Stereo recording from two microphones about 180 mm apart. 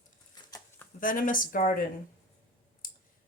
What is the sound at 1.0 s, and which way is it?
Speech, 50° left (ahead or behind).